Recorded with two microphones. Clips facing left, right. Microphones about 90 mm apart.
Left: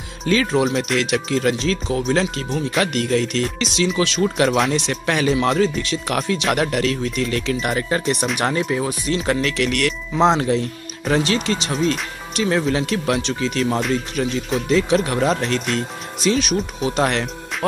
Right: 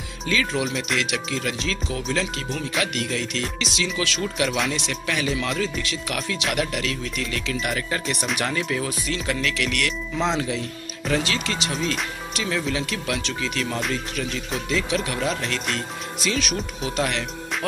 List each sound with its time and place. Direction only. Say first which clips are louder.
0.2 s speech: left 7 dB; 40° left (ahead or behind)
4.4 s speech: left 6 dB; 40° left (ahead or behind)
9.2 s speech: left 5 dB; 40° left (ahead or behind)
11.7 s speech: left 6 dB; 40° left (ahead or behind)
16.3 s speech: left 7 dB; 25° left (ahead or behind)
16.8 s speech: left 5 dB; 40° left (ahead or behind)